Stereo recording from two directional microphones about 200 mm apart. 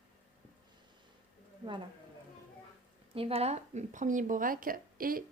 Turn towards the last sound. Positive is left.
turn(degrees=-45)  # may be behind; listen again after turning